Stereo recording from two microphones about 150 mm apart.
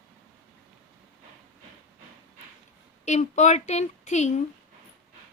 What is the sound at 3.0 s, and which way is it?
A woman's voice, 50° left (ahead or behind).